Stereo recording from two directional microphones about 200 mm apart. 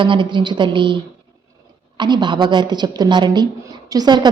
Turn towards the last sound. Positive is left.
turn(degrees=-20)  # may be behind; listen again after turning